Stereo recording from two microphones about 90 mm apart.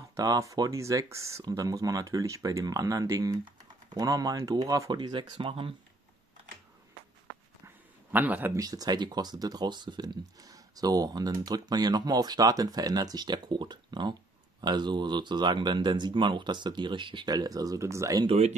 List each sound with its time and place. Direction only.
0.2 s speech: 40° right (ahead or behind); by 5.7 s 75° right (ahead or behind)
8.1 s speech: 20° right (ahead or behind)
8.5 s speech: 45° right (ahead or behind); by 17.3 s 65° right (ahead or behind)
17.3 s speech: 45° right (ahead or behind)